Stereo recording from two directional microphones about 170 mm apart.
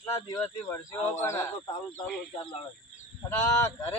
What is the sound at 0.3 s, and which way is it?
Speech, 15° left (ahead or behind).